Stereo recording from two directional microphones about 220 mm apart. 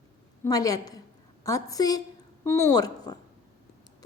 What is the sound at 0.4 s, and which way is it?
A woman's voice, 15° left (ahead or behind).